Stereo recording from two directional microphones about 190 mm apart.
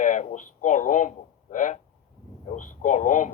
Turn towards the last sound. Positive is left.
turn(degrees=40)  # may be behind; listen again after turning